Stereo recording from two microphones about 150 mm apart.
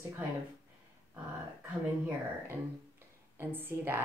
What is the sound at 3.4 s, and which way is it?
Speech, 15° right (ahead or behind).